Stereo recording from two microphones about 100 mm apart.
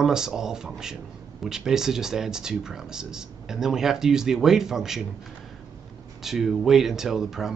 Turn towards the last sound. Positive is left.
turn(degrees=-5)  # may be behind; listen again after turning